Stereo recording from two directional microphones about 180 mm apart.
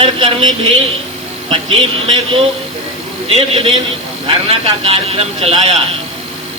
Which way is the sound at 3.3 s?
30° right (ahead or behind).